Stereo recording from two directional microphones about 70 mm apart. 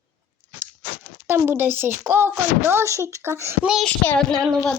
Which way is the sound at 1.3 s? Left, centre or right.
Right.